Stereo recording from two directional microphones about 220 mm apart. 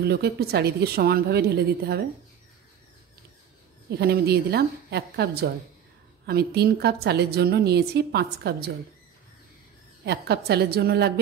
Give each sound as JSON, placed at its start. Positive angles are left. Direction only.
{"t": 0.0, "sound": "a woman's voice", "side_deg": -45}
{"t": 4.0, "sound": "a woman's voice", "side_deg": -45}
{"t": 10.0, "sound": "a woman's voice", "side_deg": -50}